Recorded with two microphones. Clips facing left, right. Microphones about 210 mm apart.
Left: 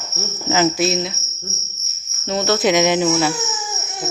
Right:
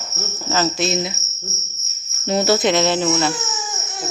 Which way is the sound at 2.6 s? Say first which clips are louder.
Left 2 dB; 15° left (ahead or behind).